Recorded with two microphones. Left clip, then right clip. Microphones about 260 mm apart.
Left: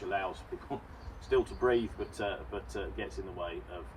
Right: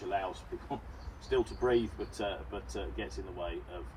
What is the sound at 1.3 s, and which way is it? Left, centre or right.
Speech, left.